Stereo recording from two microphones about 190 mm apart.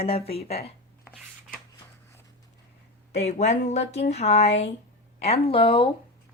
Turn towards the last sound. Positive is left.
turn(degrees=30)  # may be behind; listen again after turning